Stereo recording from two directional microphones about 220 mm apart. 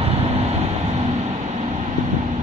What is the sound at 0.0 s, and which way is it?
Vehicle, 30° right (ahead or behind).